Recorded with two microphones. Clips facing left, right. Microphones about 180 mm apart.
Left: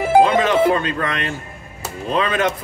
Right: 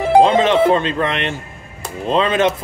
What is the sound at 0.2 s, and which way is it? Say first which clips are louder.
Music: right 3 dB; 25° right (ahead or behind).